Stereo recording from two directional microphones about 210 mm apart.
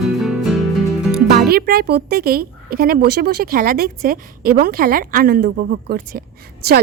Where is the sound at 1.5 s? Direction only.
45° right (ahead or behind).